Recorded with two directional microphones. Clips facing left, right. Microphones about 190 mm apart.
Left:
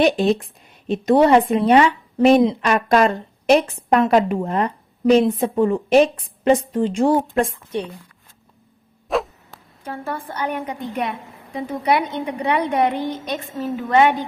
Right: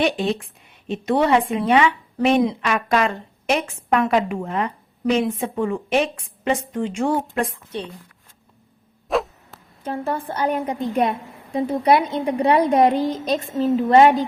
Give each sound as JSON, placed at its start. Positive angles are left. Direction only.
{"t": 0.0, "sound": "a woman's voice", "side_deg": 40}
{"t": 7.7, "sound": "speech", "side_deg": 15}
{"t": 9.0, "sound": "a sound", "side_deg": 0}
{"t": 9.8, "sound": "a woman's voice", "side_deg": -25}